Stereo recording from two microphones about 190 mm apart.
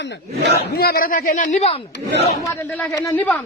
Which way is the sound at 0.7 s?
55° left (ahead or behind).